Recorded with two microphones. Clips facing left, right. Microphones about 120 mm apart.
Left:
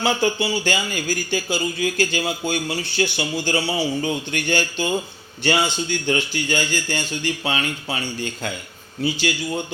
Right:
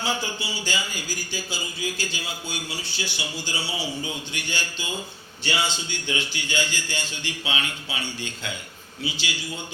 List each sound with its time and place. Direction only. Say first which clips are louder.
0.0 s a man's voice: left 8 dB; 60° left (ahead or behind)